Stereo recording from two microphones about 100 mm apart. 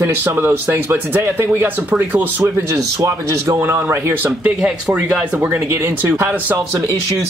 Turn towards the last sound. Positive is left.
turn(degrees=-25)  # may be behind; listen again after turning